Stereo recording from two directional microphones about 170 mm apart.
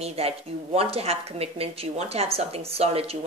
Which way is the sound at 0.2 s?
35° right (ahead or behind).